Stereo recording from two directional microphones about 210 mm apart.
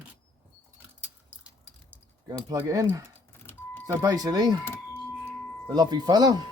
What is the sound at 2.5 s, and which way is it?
Speech, 15° right (ahead or behind).